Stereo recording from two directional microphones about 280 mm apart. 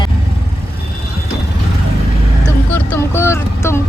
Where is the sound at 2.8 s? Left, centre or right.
Centre.